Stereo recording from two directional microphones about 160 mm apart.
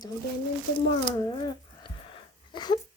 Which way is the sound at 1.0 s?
30° left (ahead or behind).